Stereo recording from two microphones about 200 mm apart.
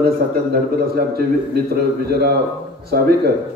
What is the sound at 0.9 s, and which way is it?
A man's voice, 50° right (ahead or behind).